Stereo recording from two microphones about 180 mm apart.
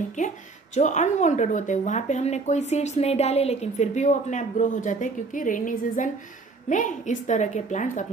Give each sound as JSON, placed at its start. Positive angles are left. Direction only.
{"t": 0.2, "sound": "a woman's voice", "side_deg": 45}